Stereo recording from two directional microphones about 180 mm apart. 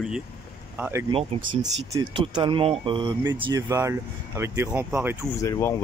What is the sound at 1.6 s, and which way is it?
Speech, 20° right (ahead or behind).